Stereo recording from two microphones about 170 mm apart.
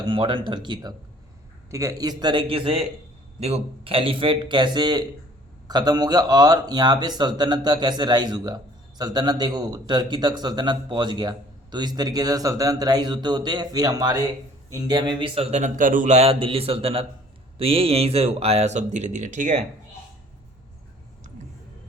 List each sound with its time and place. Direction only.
0.0 s speech: 30° right (ahead or behind); by 19.5 s 45° right (ahead or behind)